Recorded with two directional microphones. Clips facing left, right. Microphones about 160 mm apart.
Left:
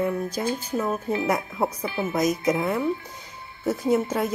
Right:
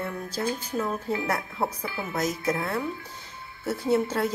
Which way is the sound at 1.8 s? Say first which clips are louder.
Left 6 dB; 25° left (ahead or behind).